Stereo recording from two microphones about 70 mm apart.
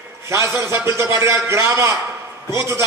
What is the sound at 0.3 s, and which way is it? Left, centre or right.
A man's voice, right.